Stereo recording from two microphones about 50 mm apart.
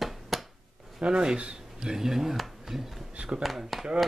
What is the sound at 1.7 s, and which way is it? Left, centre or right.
Speech, centre.